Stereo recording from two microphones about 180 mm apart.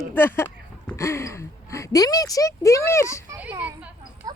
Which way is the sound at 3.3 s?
10° right (ahead or behind).